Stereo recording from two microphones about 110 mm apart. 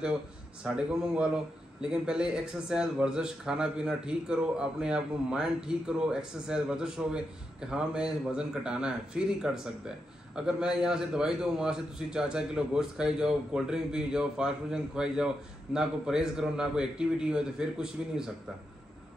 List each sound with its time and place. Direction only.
0.7 s a man's voice: 10° right (ahead or behind)